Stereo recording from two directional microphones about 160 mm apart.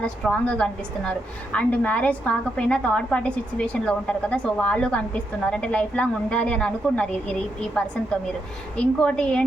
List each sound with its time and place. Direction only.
0.0 s a woman's voice: 5° left (ahead or behind)
8.7 s a woman's voice: 5° left (ahead or behind)